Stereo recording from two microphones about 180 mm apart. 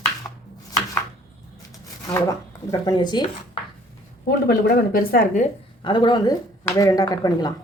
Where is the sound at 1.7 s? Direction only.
20° left (ahead or behind).